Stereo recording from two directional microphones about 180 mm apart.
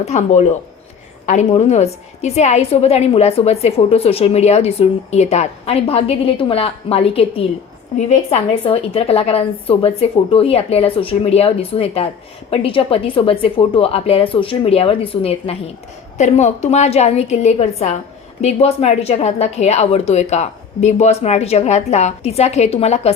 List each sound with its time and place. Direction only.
0.0 s a woman's voice: 40° left (ahead or behind)